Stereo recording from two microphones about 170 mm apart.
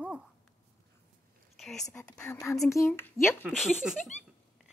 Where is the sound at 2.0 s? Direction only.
5° left (ahead or behind).